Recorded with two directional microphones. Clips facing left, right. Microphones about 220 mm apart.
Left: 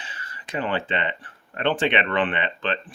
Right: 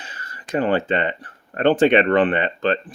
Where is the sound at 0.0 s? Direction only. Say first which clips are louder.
Right 2 dB; 40° right (ahead or behind).